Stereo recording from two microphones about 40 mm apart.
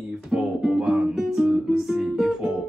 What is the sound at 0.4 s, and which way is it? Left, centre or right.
Music, centre.